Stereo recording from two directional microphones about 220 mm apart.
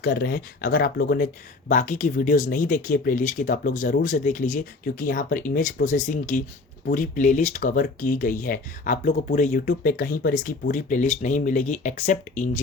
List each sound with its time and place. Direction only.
0.0 s speech: 45° left (ahead or behind)